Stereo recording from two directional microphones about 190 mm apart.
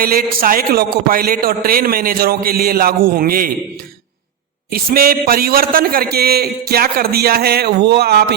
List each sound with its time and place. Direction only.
0.0 s a man's voice: 50° right (ahead or behind)
4.7 s a man's voice: 50° right (ahead or behind)